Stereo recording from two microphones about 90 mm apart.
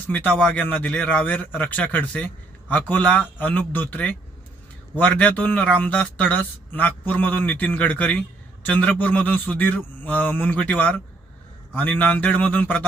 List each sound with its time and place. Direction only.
0.1 s speech: 15° left (ahead or behind)